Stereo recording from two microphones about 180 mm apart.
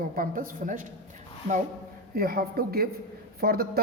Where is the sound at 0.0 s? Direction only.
50° right (ahead or behind).